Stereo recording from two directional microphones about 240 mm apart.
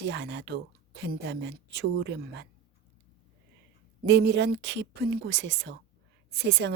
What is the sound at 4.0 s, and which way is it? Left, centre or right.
Speech, right.